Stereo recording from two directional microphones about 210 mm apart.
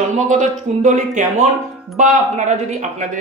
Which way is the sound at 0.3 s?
35° right (ahead or behind).